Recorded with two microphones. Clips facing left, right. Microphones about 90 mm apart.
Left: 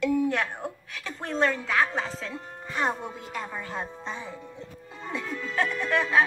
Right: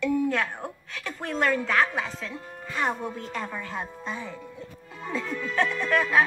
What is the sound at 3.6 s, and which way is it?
A woman's voice, 25° left (ahead or behind).